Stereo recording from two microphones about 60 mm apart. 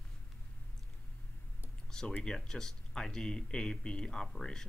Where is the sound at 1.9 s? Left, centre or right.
Centre.